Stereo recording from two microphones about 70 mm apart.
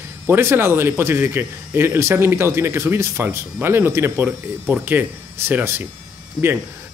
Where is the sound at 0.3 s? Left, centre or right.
Right.